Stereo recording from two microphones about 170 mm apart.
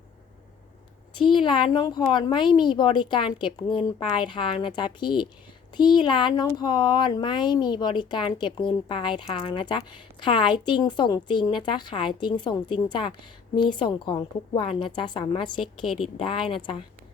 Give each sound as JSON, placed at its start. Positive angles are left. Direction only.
{"t": 1.2, "sound": "speech", "side_deg": 30}
{"t": 15.6, "sound": "a woman's voice", "side_deg": 0}
{"t": 16.1, "sound": "speech", "side_deg": 30}